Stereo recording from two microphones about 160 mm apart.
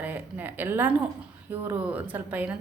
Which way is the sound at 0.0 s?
10° right (ahead or behind).